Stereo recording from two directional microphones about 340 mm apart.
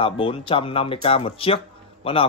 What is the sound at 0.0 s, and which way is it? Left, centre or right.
A man's voice, centre.